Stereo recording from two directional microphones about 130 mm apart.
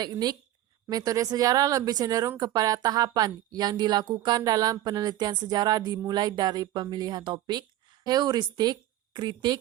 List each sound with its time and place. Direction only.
0.0 s a woman's voice: 30° right (ahead or behind)